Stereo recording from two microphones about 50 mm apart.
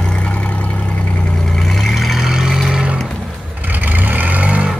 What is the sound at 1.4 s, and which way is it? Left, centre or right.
Vehicle, centre.